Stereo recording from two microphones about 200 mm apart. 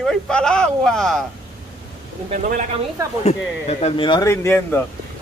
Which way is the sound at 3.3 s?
30° left (ahead or behind).